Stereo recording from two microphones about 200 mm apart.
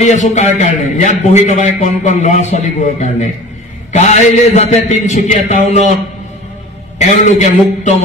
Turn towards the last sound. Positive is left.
turn(degrees=35)  # may be behind; listen again after turning